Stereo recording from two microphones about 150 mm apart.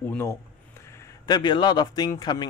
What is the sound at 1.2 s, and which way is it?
Speech, 30° left (ahead or behind).